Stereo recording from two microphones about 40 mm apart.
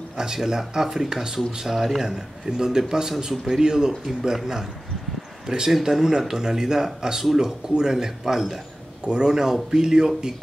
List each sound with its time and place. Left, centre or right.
0.2 s a man's voice: centre
5.7 s a man's voice: centre